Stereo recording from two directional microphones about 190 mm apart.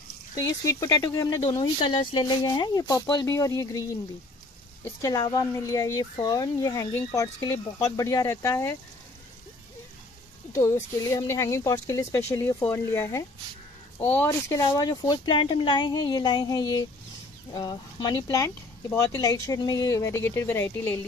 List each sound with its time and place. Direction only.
0.5 s speech: 20° left (ahead or behind)
5.0 s speech: 20° left (ahead or behind)
10.5 s speech: 15° left (ahead or behind)